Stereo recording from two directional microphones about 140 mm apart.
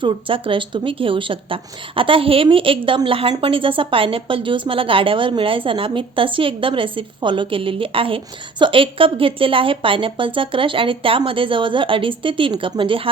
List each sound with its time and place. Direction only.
0.0 s a woman's voice: 35° right (ahead or behind)